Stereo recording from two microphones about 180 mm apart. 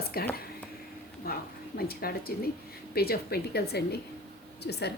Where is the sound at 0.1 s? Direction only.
55° left (ahead or behind).